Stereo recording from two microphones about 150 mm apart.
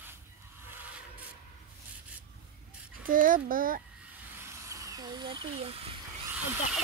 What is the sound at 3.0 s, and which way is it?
Speech, 70° right (ahead or behind).